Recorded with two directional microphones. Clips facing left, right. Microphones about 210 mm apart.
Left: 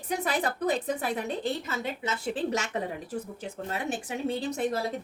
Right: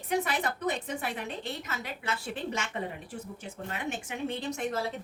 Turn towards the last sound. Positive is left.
turn(degrees=35)  # may be behind; listen again after turning